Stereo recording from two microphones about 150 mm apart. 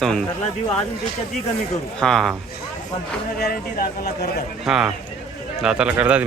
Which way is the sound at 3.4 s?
90° left.